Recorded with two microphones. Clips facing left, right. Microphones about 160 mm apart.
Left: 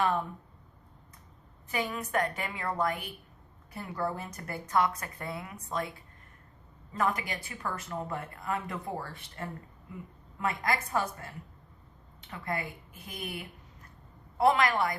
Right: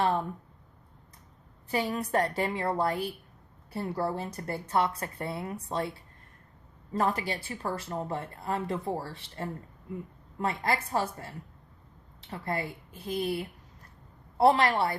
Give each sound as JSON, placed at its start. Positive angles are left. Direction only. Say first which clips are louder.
{"t": 1.7, "sound": "a woman's voice", "louder": "right 3 dB", "side_deg": -30}